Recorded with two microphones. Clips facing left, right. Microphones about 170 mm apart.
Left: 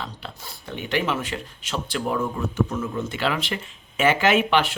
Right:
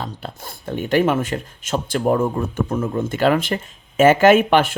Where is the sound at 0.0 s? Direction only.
45° right (ahead or behind).